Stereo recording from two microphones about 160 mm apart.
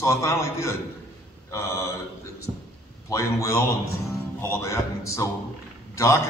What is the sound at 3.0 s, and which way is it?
A man's voice, 20° left (ahead or behind).